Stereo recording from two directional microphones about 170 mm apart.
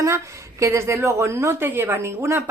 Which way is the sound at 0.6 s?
15° right (ahead or behind).